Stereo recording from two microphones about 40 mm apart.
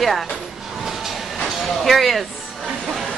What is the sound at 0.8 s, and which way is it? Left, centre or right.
Train, centre.